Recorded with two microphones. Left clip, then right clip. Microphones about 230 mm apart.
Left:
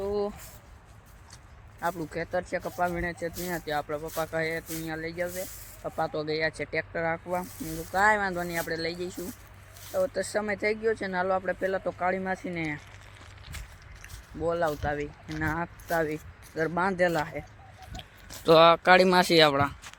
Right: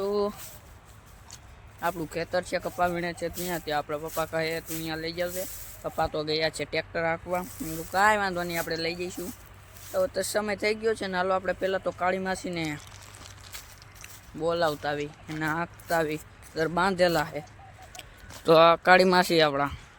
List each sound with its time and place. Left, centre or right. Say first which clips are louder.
0.0 s a sound: right 2 dB; centre
1.8 s speech: right 1 dB; centre
9.9 s speech: right 1 dB; centre
14.4 s speech: right 1 dB; centre
18.3 s speech: even; centre